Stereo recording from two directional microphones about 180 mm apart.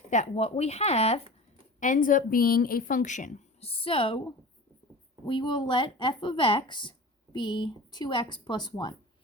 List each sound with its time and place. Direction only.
0.1 s speech: 40° left (ahead or behind)
1.8 s a woman's voice: 45° left (ahead or behind); by 9.0 s 25° left (ahead or behind)